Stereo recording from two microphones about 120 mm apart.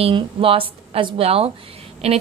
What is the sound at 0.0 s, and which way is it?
A woman's voice, 50° right (ahead or behind).